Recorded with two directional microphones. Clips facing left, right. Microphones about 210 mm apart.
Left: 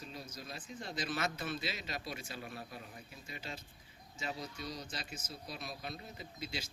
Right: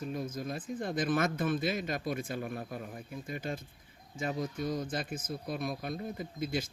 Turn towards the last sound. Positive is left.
turn(degrees=-50)  # may be behind; listen again after turning